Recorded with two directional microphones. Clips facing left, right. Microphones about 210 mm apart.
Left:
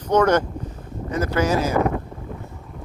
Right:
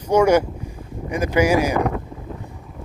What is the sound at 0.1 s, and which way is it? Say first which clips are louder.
Speech: right 2 dB; 10° right (ahead or behind).